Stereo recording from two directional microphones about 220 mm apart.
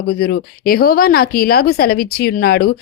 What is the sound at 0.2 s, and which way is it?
A woman's voice, 45° left (ahead or behind).